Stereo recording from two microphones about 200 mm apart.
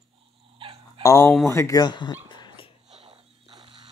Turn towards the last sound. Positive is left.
turn(degrees=-25)  # may be behind; listen again after turning